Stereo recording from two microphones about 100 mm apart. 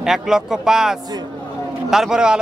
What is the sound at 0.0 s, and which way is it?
A man's voice, 5° right (ahead or behind).